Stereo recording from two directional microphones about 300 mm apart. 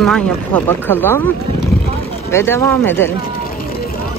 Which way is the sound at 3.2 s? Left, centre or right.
Left.